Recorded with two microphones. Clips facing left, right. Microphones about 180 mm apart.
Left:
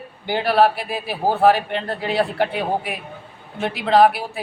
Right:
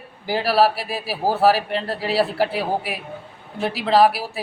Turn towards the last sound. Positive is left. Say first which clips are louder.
# left 1 dB
turn(degrees=-5)  # may be behind; listen again after turning